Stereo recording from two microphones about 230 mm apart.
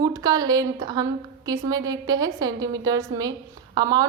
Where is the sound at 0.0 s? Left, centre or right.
Centre.